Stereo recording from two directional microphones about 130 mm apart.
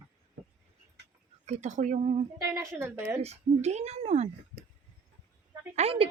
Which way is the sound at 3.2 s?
55° right (ahead or behind).